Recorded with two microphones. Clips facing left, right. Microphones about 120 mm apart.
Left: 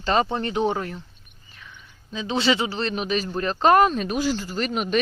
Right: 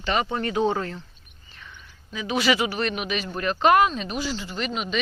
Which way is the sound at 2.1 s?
25° left (ahead or behind).